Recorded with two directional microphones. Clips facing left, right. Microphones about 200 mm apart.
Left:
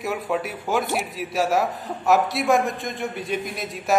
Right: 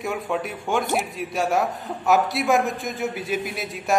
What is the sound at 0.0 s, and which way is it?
A man's voice, centre (ahead or behind).